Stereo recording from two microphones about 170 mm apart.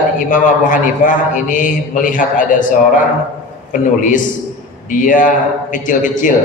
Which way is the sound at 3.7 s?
50° left (ahead or behind).